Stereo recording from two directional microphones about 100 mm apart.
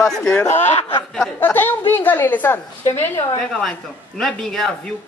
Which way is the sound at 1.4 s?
20° left (ahead or behind).